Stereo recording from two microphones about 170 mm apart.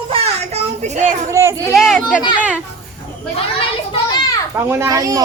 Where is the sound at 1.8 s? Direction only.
Centre (ahead or behind).